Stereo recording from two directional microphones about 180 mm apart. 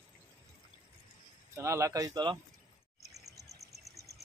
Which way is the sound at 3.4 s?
20° right (ahead or behind).